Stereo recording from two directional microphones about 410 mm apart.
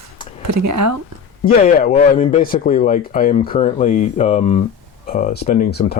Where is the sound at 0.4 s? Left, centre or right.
Right.